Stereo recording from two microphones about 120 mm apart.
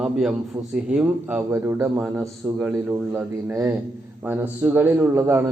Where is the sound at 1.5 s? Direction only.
20° right (ahead or behind).